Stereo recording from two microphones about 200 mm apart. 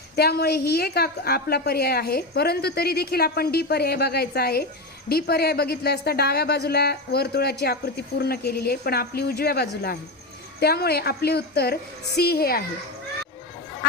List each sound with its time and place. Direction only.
0.2 s speech: 55° left (ahead or behind)